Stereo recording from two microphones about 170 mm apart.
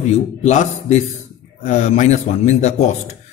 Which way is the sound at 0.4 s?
45° left (ahead or behind).